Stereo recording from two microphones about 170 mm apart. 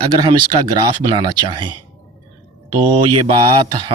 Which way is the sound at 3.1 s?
30° right (ahead or behind).